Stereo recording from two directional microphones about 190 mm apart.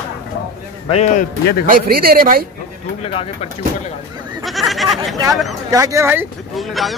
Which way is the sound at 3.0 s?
30° left (ahead or behind).